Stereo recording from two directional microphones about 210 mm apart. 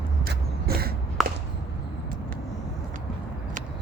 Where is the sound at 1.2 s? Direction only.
Centre (ahead or behind).